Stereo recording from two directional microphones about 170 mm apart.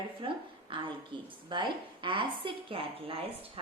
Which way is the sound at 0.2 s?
30° right (ahead or behind).